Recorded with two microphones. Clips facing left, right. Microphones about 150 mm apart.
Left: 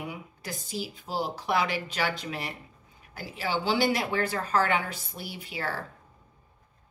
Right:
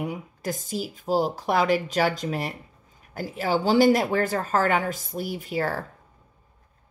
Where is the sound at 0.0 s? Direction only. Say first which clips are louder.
Right 8 dB; 45° right (ahead or behind).